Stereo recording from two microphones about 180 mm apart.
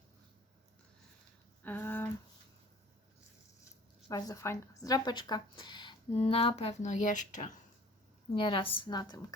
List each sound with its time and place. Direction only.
1.6 s a sound: 10° left (ahead or behind)
4.1 s speech: 20° left (ahead or behind); by 7.6 s 45° left (ahead or behind)
8.4 s speech: 30° left (ahead or behind)